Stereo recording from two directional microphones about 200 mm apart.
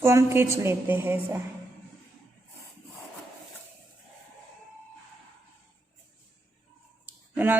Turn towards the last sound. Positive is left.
turn(degrees=-10)  # may be behind; listen again after turning